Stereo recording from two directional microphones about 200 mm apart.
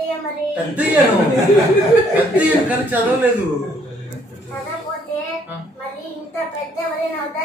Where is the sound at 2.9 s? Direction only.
10° right (ahead or behind).